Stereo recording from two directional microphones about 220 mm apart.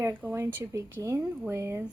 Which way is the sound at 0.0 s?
10° right (ahead or behind).